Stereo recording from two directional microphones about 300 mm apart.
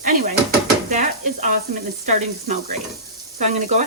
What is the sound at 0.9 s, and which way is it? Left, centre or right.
Speech, right.